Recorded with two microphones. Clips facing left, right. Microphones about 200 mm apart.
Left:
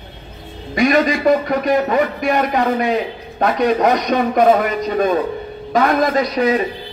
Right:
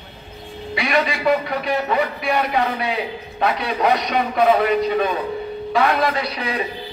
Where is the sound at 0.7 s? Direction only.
45° left (ahead or behind).